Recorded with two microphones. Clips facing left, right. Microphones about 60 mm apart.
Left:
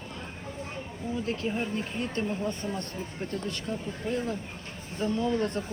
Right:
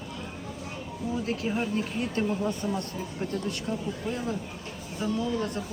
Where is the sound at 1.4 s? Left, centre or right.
Centre.